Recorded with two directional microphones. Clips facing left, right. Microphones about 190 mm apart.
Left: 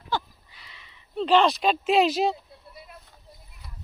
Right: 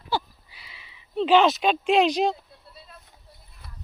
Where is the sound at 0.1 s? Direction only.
10° right (ahead or behind).